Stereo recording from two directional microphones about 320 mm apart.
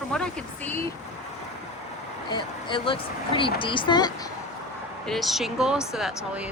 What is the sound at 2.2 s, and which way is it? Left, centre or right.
Speech, centre.